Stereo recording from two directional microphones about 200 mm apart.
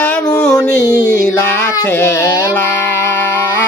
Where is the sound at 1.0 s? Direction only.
45° right (ahead or behind).